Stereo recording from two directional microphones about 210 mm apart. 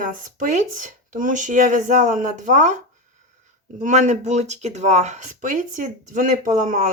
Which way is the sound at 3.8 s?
35° right (ahead or behind).